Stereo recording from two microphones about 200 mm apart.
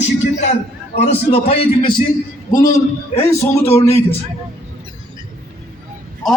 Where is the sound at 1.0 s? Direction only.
30° left (ahead or behind); by 3.6 s 10° left (ahead or behind).